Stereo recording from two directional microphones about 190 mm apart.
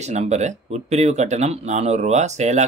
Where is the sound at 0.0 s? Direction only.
35° right (ahead or behind).